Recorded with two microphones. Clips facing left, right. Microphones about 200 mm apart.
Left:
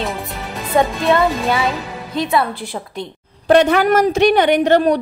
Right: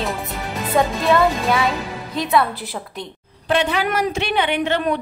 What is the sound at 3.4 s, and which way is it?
A man's voice, 45° left (ahead or behind).